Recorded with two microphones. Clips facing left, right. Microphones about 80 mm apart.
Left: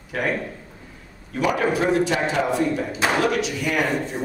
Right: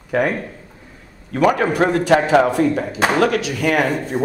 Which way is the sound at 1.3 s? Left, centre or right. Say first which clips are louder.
Right 5 dB; right.